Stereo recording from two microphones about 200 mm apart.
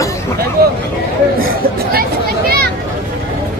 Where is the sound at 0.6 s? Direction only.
50° right (ahead or behind).